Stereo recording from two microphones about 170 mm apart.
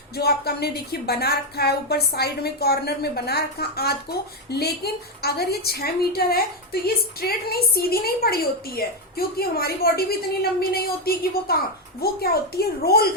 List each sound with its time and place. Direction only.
0.2 s a woman's voice: 70° left (ahead or behind)